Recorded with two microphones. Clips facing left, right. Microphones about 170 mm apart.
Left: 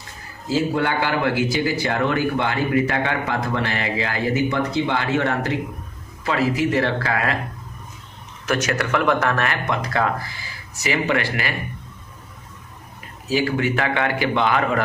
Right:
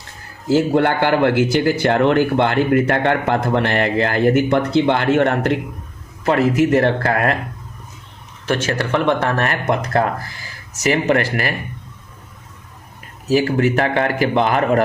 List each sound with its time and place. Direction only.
0.4 s a man's voice: 65° right (ahead or behind)
8.4 s speech: 30° right (ahead or behind); by 11.5 s 45° right (ahead or behind)
13.2 s speech: 45° right (ahead or behind)